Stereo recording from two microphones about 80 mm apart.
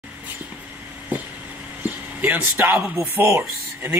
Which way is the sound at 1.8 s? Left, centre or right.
Right.